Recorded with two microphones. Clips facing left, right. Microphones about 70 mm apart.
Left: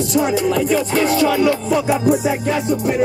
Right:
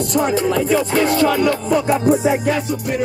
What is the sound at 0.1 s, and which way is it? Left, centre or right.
Speech, right.